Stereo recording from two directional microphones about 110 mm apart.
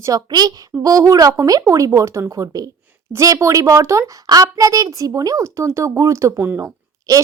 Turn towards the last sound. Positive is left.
turn(degrees=-30)  # may be behind; listen again after turning